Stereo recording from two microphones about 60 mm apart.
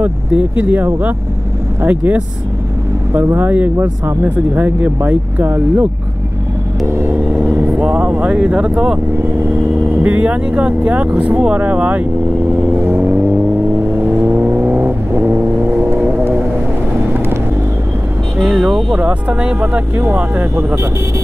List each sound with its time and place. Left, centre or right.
0.0 s speech: right
3.3 s speech: right
7.1 s speech: right; by 9.0 s centre
9.4 s speech: right
12.4 s vehicle: right
18.4 s speech: centre
18.9 s speech: right
20.3 s speech: right